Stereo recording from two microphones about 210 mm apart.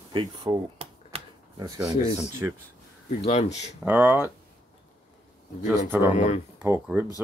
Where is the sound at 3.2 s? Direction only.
30° left (ahead or behind).